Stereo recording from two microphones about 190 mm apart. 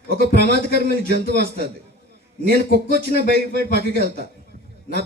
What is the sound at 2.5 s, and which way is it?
A man's voice, 60° right (ahead or behind).